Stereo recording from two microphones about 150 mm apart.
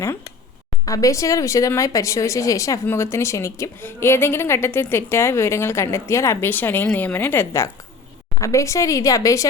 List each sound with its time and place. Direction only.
0.9 s speech: 20° left (ahead or behind)